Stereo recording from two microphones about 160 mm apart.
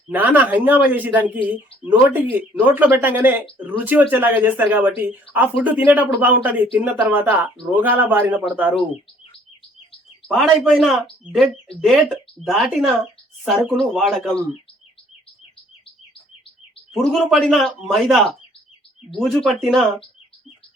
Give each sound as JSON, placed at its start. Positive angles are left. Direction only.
{"t": 0.1, "sound": "speech", "side_deg": -10}
{"t": 10.2, "sound": "speech", "side_deg": 0}
{"t": 16.9, "sound": "speech", "side_deg": 0}